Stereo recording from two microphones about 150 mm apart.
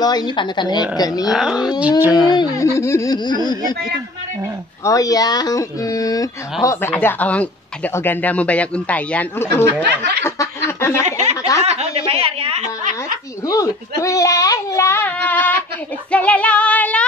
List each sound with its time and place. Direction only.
0.0 s speech: 25° left (ahead or behind)
1.2 s speech: centre (ahead or behind)
1.8 s a sound: 10° right (ahead or behind)
2.2 s speech: 25° left (ahead or behind)
4.8 s speech: 20° left (ahead or behind)
10.2 s a sound: 20° left (ahead or behind)
11.1 s snicker: 50° right (ahead or behind)
13.5 s speech: 20° left (ahead or behind)